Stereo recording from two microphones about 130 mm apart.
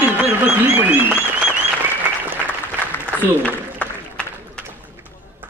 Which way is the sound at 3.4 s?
10° left (ahead or behind).